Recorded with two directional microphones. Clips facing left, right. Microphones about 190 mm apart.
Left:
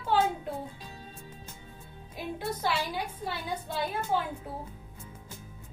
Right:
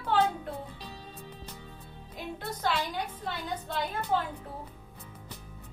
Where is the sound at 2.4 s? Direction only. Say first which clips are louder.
Even; 10° left (ahead or behind).